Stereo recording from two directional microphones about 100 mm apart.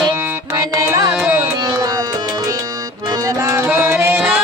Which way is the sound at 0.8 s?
35° right (ahead or behind).